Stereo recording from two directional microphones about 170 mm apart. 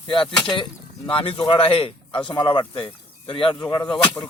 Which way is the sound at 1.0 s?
30° left (ahead or behind).